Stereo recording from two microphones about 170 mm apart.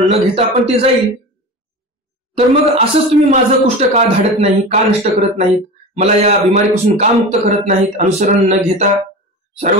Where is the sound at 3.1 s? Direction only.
40° right (ahead or behind).